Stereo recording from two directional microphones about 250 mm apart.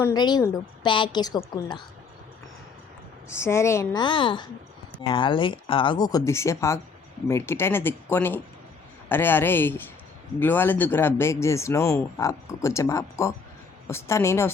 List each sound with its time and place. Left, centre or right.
0.0 s speech: centre
3.2 s speech: centre